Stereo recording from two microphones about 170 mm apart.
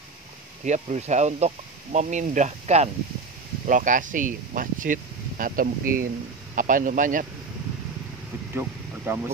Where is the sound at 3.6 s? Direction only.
50° right (ahead or behind).